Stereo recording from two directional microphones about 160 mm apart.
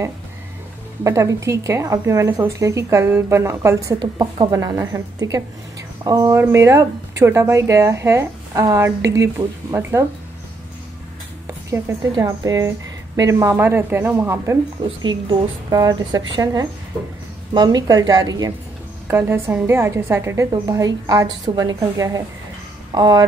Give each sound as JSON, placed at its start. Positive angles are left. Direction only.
{"t": 1.0, "sound": "a woman's voice", "side_deg": -20}
{"t": 11.4, "sound": "a woman's voice", "side_deg": -20}
{"t": 14.8, "sound": "a woman's voice", "side_deg": -30}